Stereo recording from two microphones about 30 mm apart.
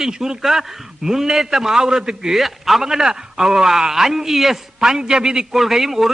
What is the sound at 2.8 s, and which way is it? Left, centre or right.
Speech, centre.